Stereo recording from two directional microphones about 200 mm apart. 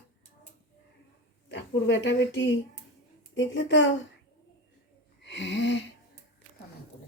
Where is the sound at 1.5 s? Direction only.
60° left (ahead or behind).